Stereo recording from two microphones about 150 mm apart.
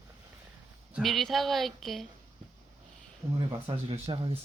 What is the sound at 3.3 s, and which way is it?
Speech, 35° right (ahead or behind).